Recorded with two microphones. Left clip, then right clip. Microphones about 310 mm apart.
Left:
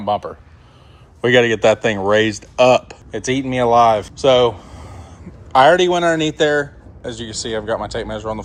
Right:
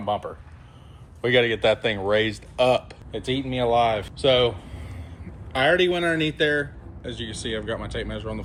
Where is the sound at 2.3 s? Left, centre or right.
Left.